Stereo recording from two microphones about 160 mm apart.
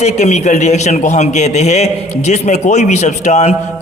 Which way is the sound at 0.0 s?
45° left (ahead or behind).